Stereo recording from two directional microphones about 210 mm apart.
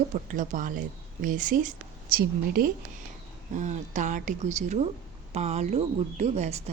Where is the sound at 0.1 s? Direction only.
35° right (ahead or behind).